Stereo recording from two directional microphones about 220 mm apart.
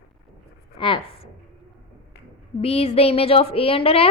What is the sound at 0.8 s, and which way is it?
Speech, 25° left (ahead or behind).